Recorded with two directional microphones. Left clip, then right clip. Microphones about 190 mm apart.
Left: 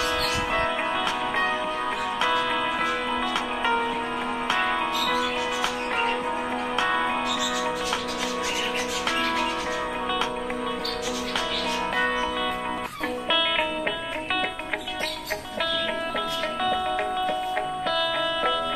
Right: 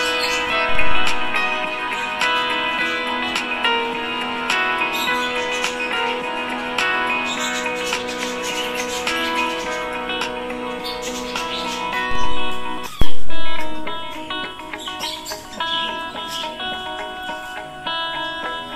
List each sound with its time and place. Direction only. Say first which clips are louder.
0.1 s music: right 5 dB; 20° right (ahead or behind)
6.8 s music: right 5 dB; 20° right (ahead or behind)